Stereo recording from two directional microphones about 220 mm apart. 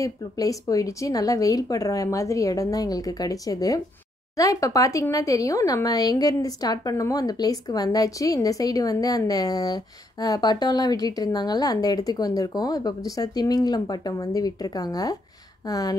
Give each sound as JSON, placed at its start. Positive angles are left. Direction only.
{"t": 0.0, "sound": "speech", "side_deg": 15}